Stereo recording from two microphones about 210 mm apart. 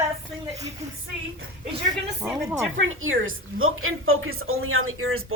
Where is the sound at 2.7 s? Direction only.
70° right (ahead or behind).